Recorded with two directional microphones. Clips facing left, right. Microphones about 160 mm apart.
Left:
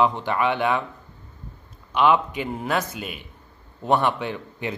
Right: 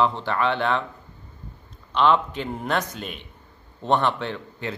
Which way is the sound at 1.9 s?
10° left (ahead or behind).